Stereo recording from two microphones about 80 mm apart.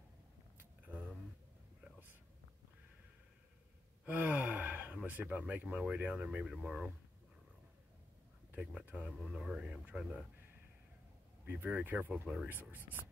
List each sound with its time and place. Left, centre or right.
0.6 s a sound: right
4.0 s gasp: right
5.8 s speech: centre
8.5 s speech: centre
9.2 s speech: centre
9.6 s speech: centre
11.4 s speech: right
12.1 s speech: centre
12.4 s speech: right